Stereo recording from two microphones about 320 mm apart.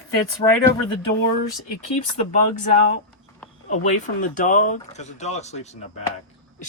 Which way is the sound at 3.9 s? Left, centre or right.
Left.